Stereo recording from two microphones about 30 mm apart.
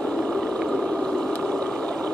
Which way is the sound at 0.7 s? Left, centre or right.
Left.